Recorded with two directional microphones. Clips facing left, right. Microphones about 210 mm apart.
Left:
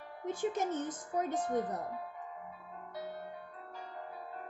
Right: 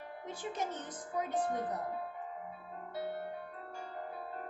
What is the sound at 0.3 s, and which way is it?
A woman's voice, 45° left (ahead or behind).